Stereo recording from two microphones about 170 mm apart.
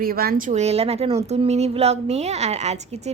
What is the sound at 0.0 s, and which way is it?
A woman's voice, 60° right (ahead or behind).